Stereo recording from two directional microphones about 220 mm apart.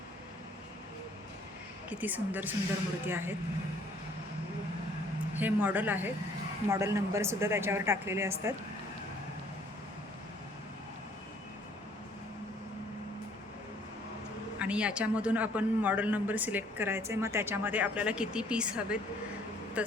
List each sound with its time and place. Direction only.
1.9 s a man's voice: 5° right (ahead or behind)
5.4 s a man's voice: 5° right (ahead or behind)
14.6 s a man's voice: 5° right (ahead or behind)